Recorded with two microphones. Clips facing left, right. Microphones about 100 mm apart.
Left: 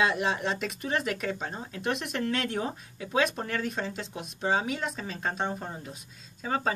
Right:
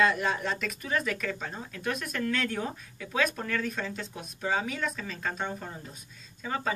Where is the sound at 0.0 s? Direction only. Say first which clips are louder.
Even; 25° left (ahead or behind).